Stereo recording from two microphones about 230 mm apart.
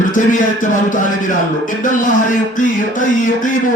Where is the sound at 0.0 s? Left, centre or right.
Left.